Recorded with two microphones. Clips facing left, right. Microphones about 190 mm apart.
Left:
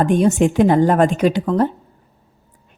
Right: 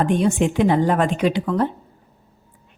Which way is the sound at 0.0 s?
45° left (ahead or behind).